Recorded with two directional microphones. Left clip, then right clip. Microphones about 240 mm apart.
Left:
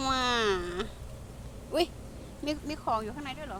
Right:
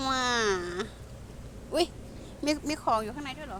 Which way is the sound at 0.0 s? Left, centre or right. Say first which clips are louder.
Even; centre.